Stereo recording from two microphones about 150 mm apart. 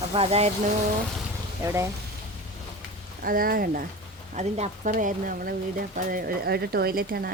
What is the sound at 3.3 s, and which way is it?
Speech, 70° right (ahead or behind).